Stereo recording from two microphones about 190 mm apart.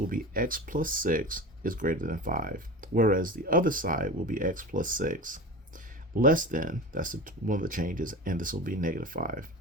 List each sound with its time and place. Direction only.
0.1 s speech: 50° right (ahead or behind)